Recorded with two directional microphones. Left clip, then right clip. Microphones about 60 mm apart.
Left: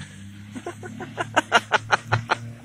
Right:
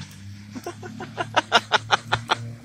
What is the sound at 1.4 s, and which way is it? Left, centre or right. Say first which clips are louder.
Snicker: even; centre.